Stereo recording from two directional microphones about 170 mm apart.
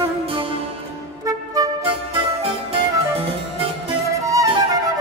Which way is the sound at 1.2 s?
20° right (ahead or behind).